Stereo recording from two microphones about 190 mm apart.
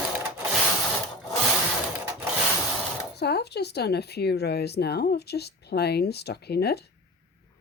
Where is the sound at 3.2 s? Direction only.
60° left (ahead or behind).